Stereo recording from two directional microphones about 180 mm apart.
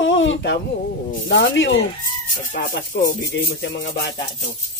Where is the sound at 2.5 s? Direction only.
50° left (ahead or behind).